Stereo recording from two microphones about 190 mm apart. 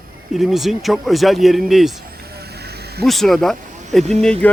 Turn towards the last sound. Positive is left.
turn(degrees=5)  # may be behind; listen again after turning